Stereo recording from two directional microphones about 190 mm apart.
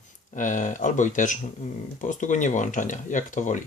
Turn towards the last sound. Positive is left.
turn(degrees=40)  # may be behind; listen again after turning